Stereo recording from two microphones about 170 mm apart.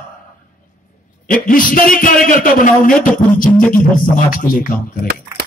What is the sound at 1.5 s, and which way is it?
Speech, 55° left (ahead or behind).